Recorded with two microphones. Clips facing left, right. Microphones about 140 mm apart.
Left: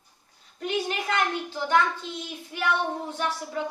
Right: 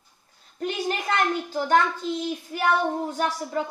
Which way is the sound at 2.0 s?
40° right (ahead or behind).